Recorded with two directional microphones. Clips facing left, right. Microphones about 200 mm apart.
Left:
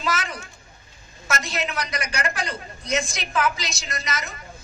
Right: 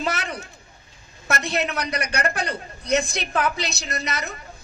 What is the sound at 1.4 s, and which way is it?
A woman's voice, 60° right (ahead or behind).